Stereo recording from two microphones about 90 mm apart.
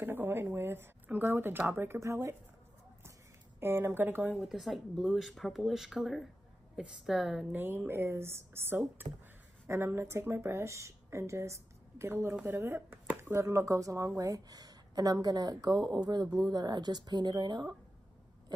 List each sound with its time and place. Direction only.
0.0 s a sound: 25° right (ahead or behind)
1.2 s speech: 25° right (ahead or behind)
3.5 s speech: 30° right (ahead or behind)
4.3 s speech: 5° right (ahead or behind)
7.5 s speech: 25° right (ahead or behind)
13.2 s speech: 30° right (ahead or behind); by 17.6 s 55° right (ahead or behind)